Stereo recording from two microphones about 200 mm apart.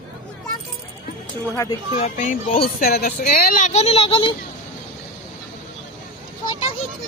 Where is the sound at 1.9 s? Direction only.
40° left (ahead or behind).